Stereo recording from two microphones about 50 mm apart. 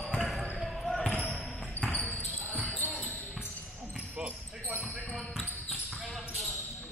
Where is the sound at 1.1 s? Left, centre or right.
Left.